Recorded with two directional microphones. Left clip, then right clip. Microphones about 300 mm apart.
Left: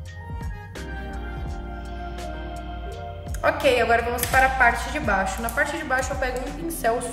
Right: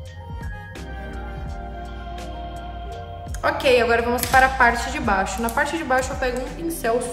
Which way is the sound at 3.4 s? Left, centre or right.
Centre.